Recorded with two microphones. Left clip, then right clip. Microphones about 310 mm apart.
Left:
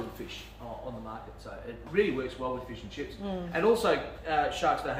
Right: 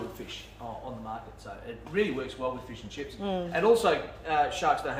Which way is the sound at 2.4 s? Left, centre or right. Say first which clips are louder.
Right 1 dB; right.